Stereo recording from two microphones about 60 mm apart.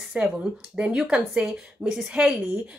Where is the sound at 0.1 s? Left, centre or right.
Centre.